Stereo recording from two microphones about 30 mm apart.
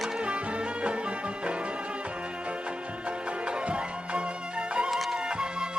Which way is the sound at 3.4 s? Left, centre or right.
Right.